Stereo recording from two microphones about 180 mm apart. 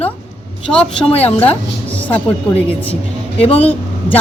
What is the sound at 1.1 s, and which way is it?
Speech, 35° left (ahead or behind).